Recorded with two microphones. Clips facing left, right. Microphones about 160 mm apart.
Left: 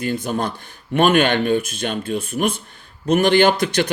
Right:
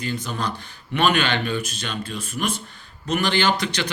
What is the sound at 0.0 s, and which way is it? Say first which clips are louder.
Speech: left 5 dB; 50° left (ahead or behind).